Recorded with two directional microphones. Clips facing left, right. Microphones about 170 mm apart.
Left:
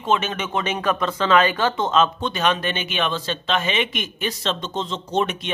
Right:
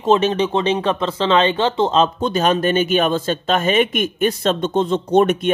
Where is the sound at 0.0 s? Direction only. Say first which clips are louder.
Right 7 dB; 35° right (ahead or behind).